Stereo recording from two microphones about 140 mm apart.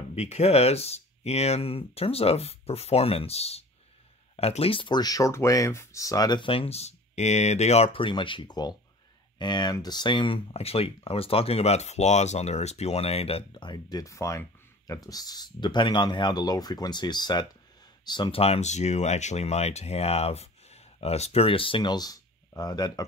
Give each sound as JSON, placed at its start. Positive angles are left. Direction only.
{"t": 0.1, "sound": "speech", "side_deg": 50}
{"t": 18.4, "sound": "speech", "side_deg": 50}